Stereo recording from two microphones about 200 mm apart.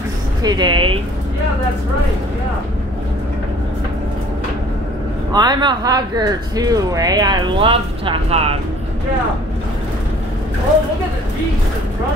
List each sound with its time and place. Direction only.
0.4 s speech: 20° right (ahead or behind)
5.3 s speech: 20° right (ahead or behind)